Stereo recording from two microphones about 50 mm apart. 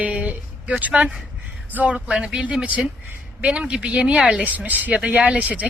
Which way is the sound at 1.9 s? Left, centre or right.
Centre.